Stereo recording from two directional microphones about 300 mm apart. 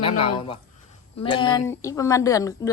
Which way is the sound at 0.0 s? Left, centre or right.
Centre.